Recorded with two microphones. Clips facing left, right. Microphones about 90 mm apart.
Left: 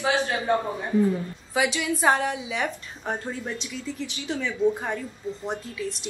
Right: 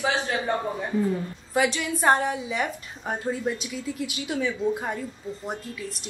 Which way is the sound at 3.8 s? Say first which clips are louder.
Right 1 dB; 10° right (ahead or behind).